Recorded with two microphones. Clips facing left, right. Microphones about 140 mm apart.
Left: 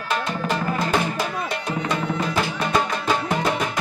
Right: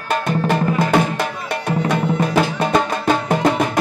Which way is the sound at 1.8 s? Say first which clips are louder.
Right 6 dB; 55° right (ahead or behind).